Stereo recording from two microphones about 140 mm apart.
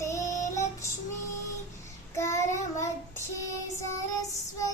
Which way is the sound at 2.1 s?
20° left (ahead or behind).